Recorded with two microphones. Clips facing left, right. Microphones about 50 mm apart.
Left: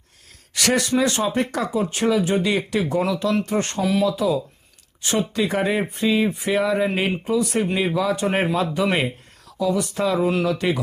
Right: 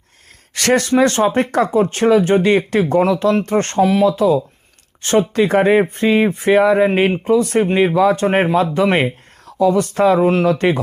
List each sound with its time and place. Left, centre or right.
0.5 s speech: right
5.4 s speech: right
9.5 s speech: right